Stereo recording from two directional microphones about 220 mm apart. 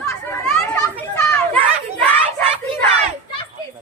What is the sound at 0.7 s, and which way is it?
Children playing, 10° left (ahead or behind).